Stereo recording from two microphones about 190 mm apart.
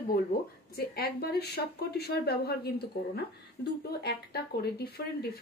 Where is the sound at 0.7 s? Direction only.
55° left (ahead or behind).